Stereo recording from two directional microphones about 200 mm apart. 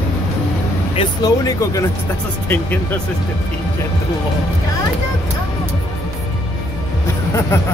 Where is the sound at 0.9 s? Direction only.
20° left (ahead or behind).